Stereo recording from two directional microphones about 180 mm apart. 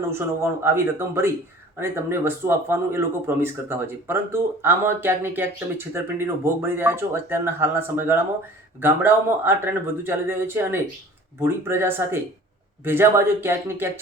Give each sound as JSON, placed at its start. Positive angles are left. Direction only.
{"t": 0.1, "sound": "speech", "side_deg": -15}